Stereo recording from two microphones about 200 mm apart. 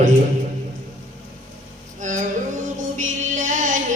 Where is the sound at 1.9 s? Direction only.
40° right (ahead or behind).